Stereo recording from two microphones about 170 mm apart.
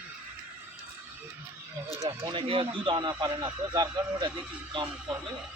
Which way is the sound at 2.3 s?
30° right (ahead or behind).